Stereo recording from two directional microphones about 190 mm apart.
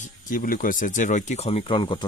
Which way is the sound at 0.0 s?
45° left (ahead or behind).